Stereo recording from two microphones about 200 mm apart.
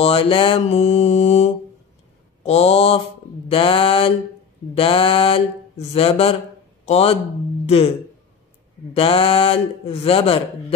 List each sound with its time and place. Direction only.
0.0 s mantra: 25° left (ahead or behind)
2.4 s speech: 30° left (ahead or behind)
8.9 s speech: 30° left (ahead or behind)